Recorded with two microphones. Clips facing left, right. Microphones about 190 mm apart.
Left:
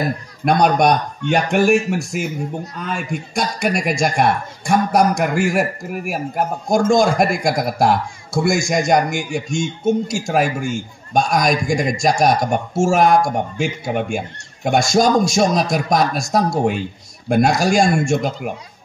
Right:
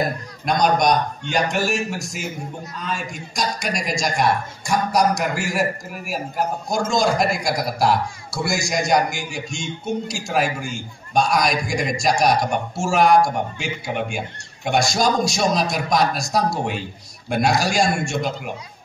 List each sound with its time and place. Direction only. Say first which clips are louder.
0.5 s a man's voice: left 3 dB; 60° left (ahead or behind)